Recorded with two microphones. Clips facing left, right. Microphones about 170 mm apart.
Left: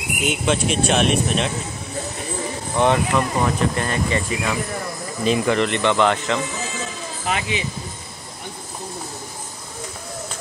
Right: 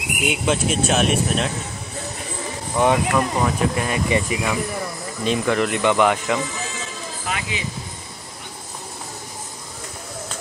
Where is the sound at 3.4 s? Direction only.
5° right (ahead or behind).